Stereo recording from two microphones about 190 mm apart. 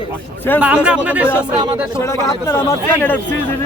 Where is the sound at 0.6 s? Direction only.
5° right (ahead or behind).